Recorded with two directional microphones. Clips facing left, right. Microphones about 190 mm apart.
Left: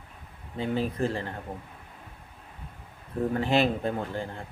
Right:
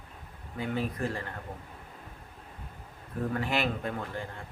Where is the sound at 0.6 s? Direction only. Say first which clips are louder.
Left 4 dB; 25° left (ahead or behind).